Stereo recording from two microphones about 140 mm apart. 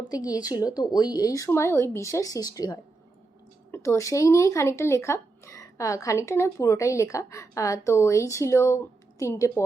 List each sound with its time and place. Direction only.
0.1 s speech: 25° left (ahead or behind)